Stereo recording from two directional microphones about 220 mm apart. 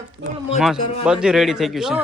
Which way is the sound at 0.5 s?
Centre (ahead or behind).